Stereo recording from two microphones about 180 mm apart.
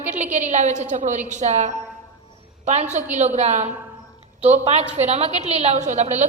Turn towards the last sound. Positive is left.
turn(degrees=-40)  # may be behind; listen again after turning